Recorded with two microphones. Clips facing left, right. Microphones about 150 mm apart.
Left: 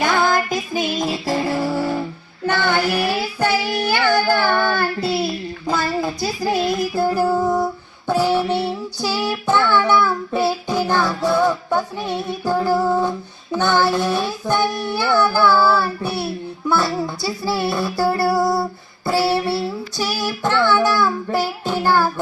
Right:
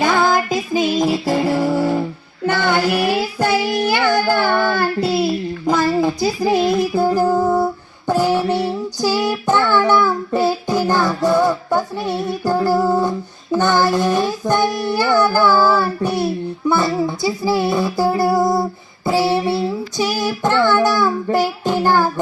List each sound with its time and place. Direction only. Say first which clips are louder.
0.1 s music: right 2 dB; 25° right (ahead or behind)
2.5 s child singing: right 2 dB; 15° right (ahead or behind)
6.5 s child singing: right 3 dB; 25° right (ahead or behind)
7.0 s female singing: even; 15° right (ahead or behind)
9.0 s child singing: right 5 dB; 10° right (ahead or behind)
17.2 s female singing: right 4 dB; 15° right (ahead or behind)